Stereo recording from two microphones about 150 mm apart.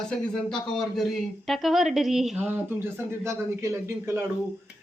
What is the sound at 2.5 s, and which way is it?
Speech, 15° right (ahead or behind).